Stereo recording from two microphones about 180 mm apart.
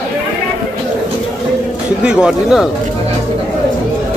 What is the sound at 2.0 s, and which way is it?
Speech, 5° right (ahead or behind).